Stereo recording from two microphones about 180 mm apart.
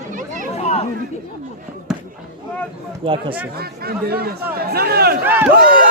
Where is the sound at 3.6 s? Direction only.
60° right (ahead or behind).